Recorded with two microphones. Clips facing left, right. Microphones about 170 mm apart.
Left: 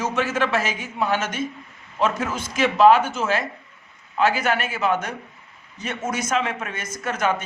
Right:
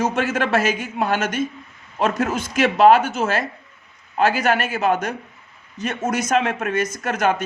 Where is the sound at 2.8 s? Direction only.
50° right (ahead or behind).